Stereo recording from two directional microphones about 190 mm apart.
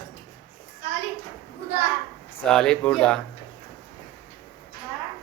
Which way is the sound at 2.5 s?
5° left (ahead or behind).